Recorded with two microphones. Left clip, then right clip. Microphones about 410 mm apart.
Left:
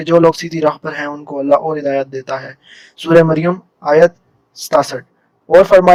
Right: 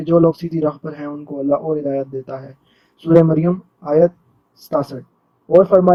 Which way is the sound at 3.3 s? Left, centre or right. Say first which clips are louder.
Left 3 dB; left.